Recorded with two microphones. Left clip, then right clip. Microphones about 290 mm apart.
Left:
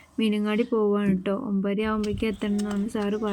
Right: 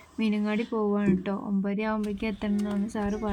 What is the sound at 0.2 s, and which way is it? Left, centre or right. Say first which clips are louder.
A woman's voice: left 4 dB; centre.